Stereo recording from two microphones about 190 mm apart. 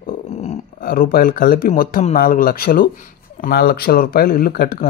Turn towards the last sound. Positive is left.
turn(degrees=55)  # may be behind; listen again after turning